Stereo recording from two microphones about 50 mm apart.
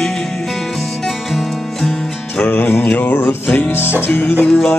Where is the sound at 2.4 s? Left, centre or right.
Left.